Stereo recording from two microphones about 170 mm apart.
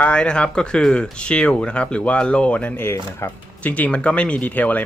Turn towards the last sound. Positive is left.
turn(degrees=10)  # may be behind; listen again after turning